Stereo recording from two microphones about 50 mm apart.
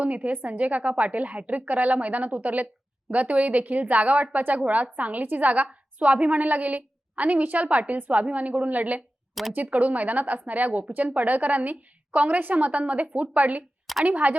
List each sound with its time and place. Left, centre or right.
0.0 s a woman's voice: right